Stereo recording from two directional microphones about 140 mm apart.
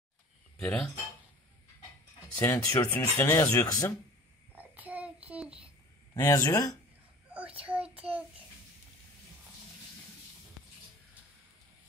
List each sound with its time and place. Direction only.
0.6 s speech: 10° left (ahead or behind)
2.4 s speech: 20° left (ahead or behind)
4.6 s child singing: 10° right (ahead or behind)
6.1 s speech: 25° left (ahead or behind)
7.2 s a sound: 10° right (ahead or behind)
7.6 s child singing: 10° right (ahead or behind)